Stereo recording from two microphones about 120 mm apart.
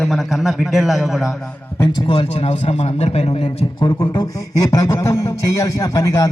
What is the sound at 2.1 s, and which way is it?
A man's voice, 55° left (ahead or behind).